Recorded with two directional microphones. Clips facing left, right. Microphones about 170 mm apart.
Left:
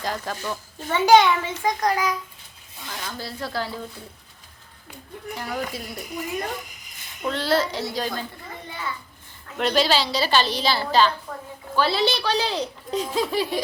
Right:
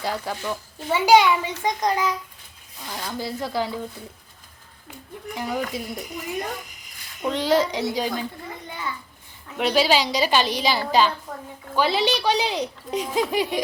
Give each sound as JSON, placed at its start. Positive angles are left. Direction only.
{"t": 0.0, "sound": "speech", "side_deg": -10}
{"t": 1.6, "sound": "speech", "side_deg": -20}
{"t": 5.3, "sound": "speech", "side_deg": -20}
{"t": 7.2, "sound": "speech", "side_deg": -15}
{"t": 9.6, "sound": "speech", "side_deg": -10}